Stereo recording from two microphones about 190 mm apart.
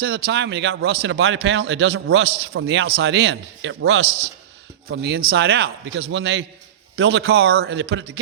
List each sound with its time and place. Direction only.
0.0 s a man's voice: 60° right (ahead or behind)
4.9 s a man's voice: 55° right (ahead or behind)
7.6 s a man's voice: 70° right (ahead or behind)